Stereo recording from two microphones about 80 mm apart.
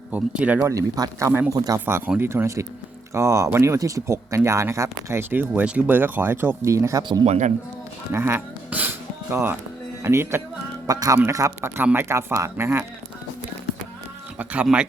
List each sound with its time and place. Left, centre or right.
0.1 s speech: centre
0.6 s speech: right
1.8 s speech: right
2.3 s speech: right
5.3 s speech: right
6.7 s speech: right
8.1 s speech: right
8.7 s music: right
9.3 s speech: right
10.8 s speech: right
11.8 s speech: right
14.3 s speech: centre